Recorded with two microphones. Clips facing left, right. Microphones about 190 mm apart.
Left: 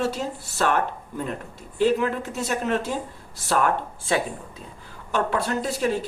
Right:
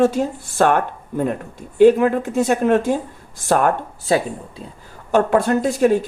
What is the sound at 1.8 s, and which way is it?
Speech, 50° right (ahead or behind).